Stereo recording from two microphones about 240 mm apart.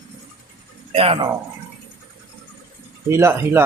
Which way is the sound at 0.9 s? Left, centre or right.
Right.